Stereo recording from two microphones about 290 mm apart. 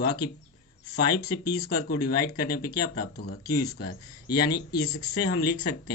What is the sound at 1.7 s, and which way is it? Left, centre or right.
Speech, left.